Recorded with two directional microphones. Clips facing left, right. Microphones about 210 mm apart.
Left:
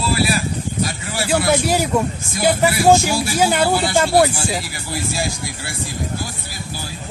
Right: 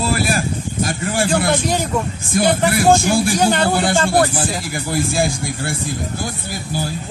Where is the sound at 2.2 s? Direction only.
55° right (ahead or behind).